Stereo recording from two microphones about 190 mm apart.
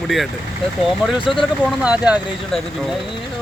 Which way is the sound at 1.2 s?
25° left (ahead or behind).